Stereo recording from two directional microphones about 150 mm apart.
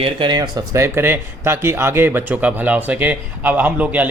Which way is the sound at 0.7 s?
15° right (ahead or behind).